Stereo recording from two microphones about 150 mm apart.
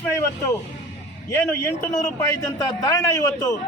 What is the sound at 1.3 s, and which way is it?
A man's voice, 15° left (ahead or behind).